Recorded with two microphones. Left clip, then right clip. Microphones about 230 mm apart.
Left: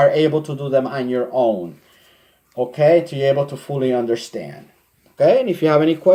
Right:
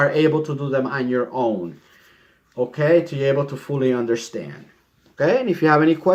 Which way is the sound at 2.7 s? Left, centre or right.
Centre.